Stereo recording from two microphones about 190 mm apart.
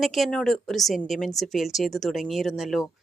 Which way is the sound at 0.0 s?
Centre (ahead or behind).